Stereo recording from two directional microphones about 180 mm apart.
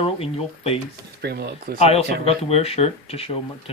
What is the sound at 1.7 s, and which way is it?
Speech, 35° left (ahead or behind).